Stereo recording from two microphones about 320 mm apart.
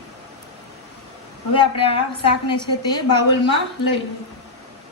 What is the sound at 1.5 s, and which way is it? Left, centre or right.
A man's voice, centre.